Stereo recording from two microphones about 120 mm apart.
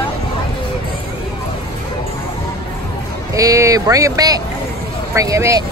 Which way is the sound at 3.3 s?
30° right (ahead or behind).